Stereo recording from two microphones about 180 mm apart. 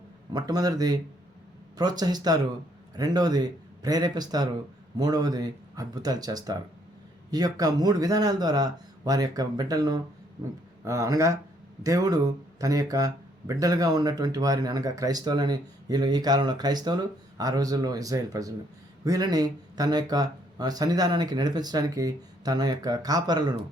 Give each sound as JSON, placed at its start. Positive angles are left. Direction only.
{"t": 0.3, "sound": "speech", "side_deg": -20}